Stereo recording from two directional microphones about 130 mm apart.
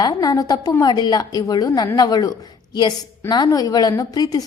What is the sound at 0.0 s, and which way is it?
A woman's voice, 30° left (ahead or behind).